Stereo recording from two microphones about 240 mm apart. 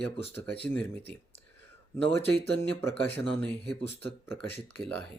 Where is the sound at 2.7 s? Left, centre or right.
Centre.